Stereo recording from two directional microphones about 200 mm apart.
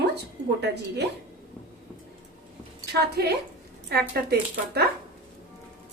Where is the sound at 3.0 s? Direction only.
55° right (ahead or behind).